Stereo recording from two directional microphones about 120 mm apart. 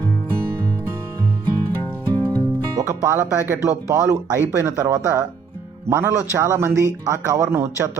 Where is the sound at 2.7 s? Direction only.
25° right (ahead or behind).